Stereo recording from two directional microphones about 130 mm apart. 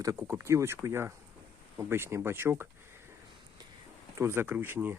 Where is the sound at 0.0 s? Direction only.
25° right (ahead or behind).